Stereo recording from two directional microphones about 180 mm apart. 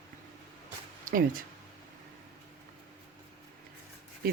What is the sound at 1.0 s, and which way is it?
Speech, 50° right (ahead or behind).